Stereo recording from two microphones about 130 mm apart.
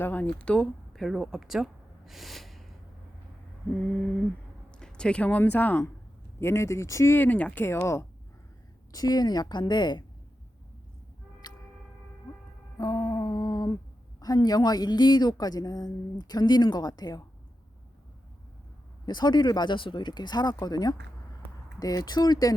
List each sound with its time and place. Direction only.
0.0 s speech: 15° left (ahead or behind)
4.7 s a woman's voice: 5° left (ahead or behind); by 10.0 s 35° left (ahead or behind)
11.4 s a sound: 35° left (ahead or behind)
12.8 s a sound: 30° left (ahead or behind)
14.2 s a woman's voice: 30° left (ahead or behind)
19.0 s a woman's voice: 35° left (ahead or behind)